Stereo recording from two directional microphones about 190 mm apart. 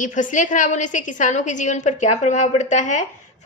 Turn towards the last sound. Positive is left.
turn(degrees=40)  # may be behind; listen again after turning